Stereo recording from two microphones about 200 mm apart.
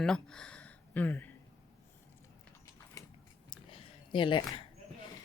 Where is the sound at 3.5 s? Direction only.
25° left (ahead or behind).